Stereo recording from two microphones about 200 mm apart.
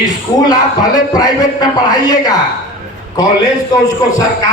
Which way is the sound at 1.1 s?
20° left (ahead or behind).